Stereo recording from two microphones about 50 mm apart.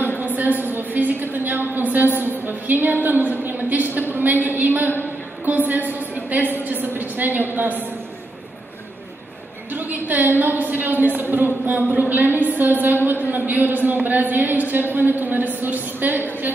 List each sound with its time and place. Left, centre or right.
0.2 s a woman's voice: right
9.7 s speech: right